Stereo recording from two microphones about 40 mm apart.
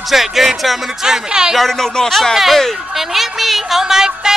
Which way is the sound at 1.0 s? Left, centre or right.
Centre.